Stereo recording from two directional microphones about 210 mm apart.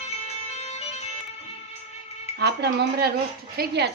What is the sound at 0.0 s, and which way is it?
Music, 30° left (ahead or behind).